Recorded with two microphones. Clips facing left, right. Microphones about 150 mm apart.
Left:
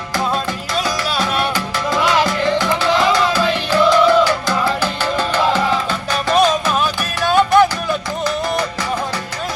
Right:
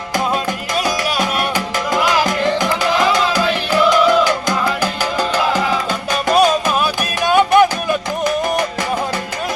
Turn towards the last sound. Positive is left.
turn(degrees=-15)  # may be behind; listen again after turning